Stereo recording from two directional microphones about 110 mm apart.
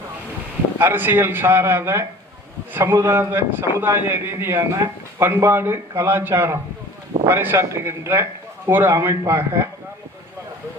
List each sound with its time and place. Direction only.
0.8 s a man's voice: 20° right (ahead or behind)